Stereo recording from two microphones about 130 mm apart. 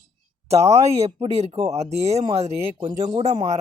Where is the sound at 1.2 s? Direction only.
50° right (ahead or behind).